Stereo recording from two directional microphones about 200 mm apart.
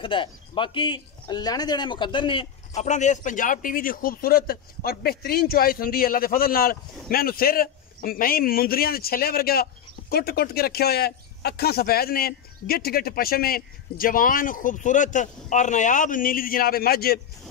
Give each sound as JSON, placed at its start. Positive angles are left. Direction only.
{"t": 0.0, "sound": "speech", "side_deg": 25}